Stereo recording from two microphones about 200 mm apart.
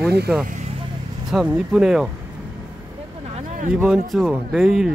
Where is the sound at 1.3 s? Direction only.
5° right (ahead or behind).